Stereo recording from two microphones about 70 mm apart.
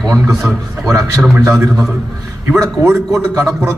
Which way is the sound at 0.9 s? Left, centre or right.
Right.